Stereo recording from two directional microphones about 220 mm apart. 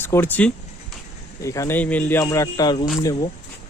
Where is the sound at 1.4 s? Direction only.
15° left (ahead or behind).